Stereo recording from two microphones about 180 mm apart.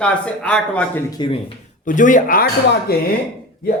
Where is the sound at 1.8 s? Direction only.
45° left (ahead or behind).